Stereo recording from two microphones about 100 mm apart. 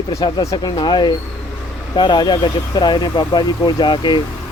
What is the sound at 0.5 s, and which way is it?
Speech, 50° left (ahead or behind).